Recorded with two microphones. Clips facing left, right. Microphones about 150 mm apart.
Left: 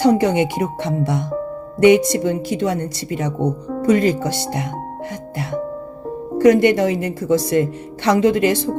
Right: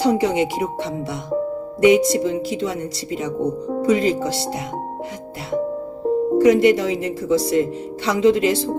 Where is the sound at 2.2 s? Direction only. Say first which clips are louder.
Left 2 dB; 60° left (ahead or behind).